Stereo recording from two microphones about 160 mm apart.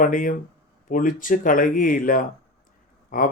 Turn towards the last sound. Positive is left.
turn(degrees=60)  # may be behind; listen again after turning